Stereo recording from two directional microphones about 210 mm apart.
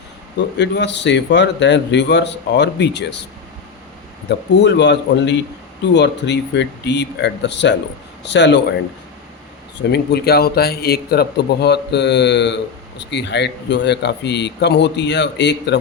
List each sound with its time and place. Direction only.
0.3 s a man's voice: 55° left (ahead or behind)
4.3 s a man's voice: 55° left (ahead or behind)
9.9 s a man's voice: 50° left (ahead or behind)